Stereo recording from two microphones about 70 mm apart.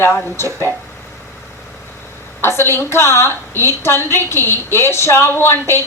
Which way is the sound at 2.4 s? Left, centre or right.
Left.